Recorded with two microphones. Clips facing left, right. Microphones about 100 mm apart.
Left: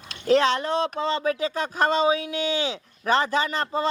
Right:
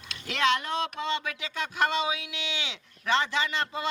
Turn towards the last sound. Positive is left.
turn(degrees=40)  # may be behind; listen again after turning